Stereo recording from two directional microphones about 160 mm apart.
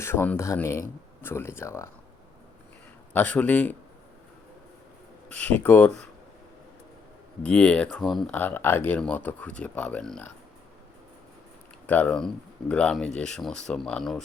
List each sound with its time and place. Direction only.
0.0 s speech: 15° left (ahead or behind)
3.1 s speech: 10° left (ahead or behind)
5.3 s speech: 10° left (ahead or behind)
7.4 s speech: 10° left (ahead or behind)
11.9 s speech: 10° left (ahead or behind)